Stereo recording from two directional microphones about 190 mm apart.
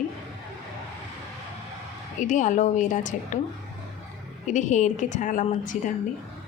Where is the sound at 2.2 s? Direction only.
40° left (ahead or behind).